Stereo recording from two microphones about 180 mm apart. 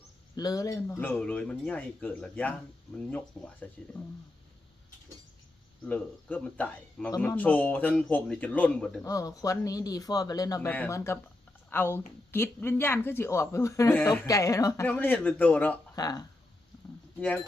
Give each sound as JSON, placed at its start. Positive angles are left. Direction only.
{"t": 0.3, "sound": "speech", "side_deg": 20}
{"t": 3.6, "sound": "speech", "side_deg": 10}
{"t": 5.8, "sound": "speech", "side_deg": 10}
{"t": 9.0, "sound": "speech", "side_deg": 20}
{"t": 16.0, "sound": "speech", "side_deg": 20}
{"t": 17.2, "sound": "speech", "side_deg": 10}